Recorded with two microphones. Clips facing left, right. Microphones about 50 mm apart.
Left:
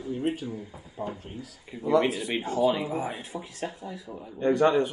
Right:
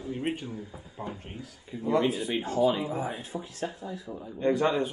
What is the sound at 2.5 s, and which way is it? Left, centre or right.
A man's voice, left.